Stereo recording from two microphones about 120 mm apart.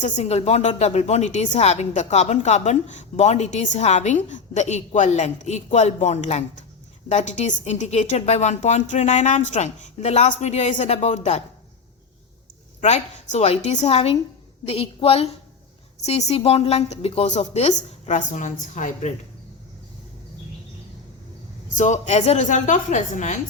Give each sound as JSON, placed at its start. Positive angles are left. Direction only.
{"t": 0.0, "sound": "a woman's voice", "side_deg": 60}
{"t": 12.8, "sound": "a woman's voice", "side_deg": 75}
{"t": 16.0, "sound": "a woman's voice", "side_deg": 65}
{"t": 17.2, "sound": "a woman's voice", "side_deg": 75}
{"t": 21.8, "sound": "a woman's voice", "side_deg": 75}